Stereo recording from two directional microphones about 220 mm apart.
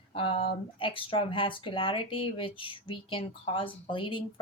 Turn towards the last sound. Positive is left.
turn(degrees=25)  # may be behind; listen again after turning